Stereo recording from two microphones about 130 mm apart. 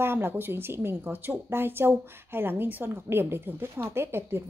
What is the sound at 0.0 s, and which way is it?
Speech, 15° right (ahead or behind).